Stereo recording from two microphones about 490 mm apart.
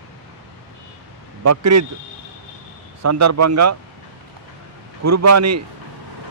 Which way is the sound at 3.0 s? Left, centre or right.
Right.